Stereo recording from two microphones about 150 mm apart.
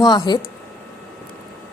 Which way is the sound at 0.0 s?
30° left (ahead or behind).